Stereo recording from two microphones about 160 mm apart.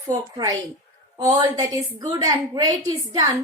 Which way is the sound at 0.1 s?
20° right (ahead or behind).